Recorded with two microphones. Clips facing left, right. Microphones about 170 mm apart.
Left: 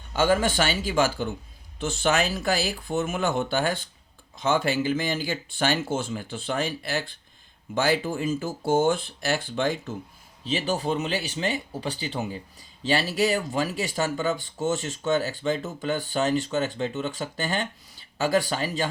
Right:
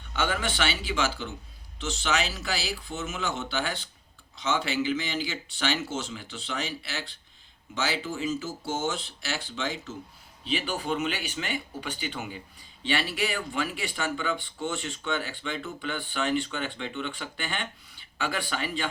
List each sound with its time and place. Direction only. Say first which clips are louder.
0.1 s speech: left 7 dB; 40° left (ahead or behind)
10.4 s speech: left 4 dB; 40° left (ahead or behind)